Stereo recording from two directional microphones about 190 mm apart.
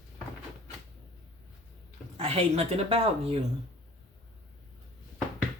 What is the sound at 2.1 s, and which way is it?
Speech, 30° right (ahead or behind).